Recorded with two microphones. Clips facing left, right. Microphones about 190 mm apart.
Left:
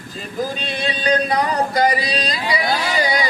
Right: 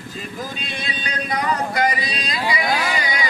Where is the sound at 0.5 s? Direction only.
35° left (ahead or behind).